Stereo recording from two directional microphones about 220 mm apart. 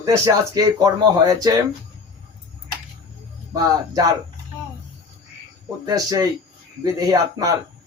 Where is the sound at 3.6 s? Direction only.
15° right (ahead or behind).